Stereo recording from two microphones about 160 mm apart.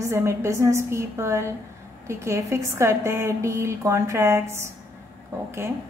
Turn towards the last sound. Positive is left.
turn(degrees=-15)  # may be behind; listen again after turning